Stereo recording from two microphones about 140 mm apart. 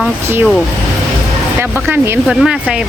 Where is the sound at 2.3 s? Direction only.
5° right (ahead or behind).